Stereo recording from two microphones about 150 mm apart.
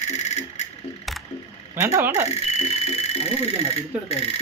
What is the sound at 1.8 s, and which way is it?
Speech, 15° right (ahead or behind).